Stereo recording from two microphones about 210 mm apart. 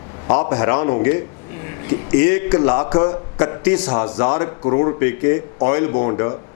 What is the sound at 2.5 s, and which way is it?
A man's voice, 25° left (ahead or behind).